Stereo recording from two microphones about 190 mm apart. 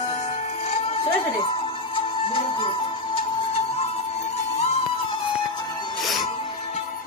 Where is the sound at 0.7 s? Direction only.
30° left (ahead or behind).